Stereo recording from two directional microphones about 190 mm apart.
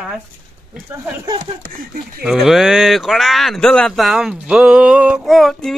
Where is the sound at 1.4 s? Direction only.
50° right (ahead or behind).